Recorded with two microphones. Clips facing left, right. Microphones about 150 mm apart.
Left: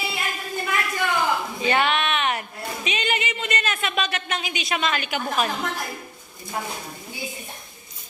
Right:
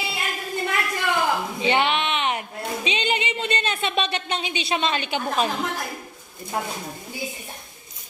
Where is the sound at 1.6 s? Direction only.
20° right (ahead or behind).